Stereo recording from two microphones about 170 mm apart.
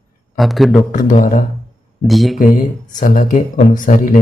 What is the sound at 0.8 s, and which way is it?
Speech, 50° left (ahead or behind).